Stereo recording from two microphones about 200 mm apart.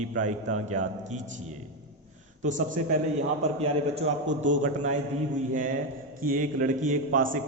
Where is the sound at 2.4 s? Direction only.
40° right (ahead or behind).